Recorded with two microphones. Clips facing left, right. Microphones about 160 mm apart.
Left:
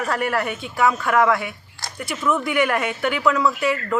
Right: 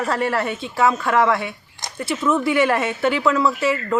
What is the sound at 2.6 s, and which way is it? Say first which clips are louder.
Speech: right 3 dB; 25° right (ahead or behind).